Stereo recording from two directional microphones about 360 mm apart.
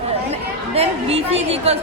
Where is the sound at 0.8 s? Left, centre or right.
Centre.